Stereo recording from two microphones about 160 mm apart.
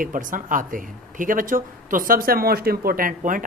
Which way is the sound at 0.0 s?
55° right (ahead or behind).